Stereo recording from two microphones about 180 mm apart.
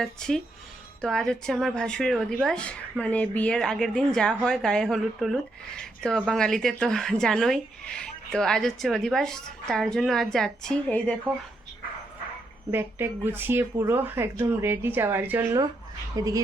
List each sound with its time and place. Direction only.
0.0 s speech: 5° left (ahead or behind)
12.7 s speech: 10° right (ahead or behind)